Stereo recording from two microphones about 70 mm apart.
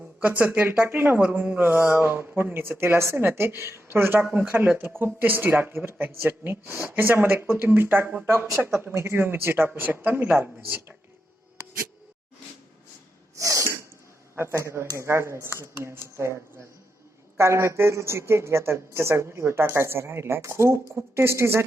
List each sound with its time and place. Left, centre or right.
0.2 s speech: right
1.2 s speech: centre
13.4 s sneeze: right
14.3 s speech: right